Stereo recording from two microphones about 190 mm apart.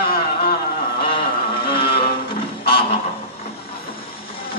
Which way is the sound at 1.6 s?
25° left (ahead or behind).